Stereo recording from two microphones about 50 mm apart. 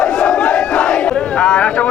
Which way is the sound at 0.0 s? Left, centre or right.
Centre.